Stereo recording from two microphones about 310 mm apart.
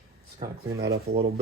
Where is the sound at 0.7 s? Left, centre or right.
Right.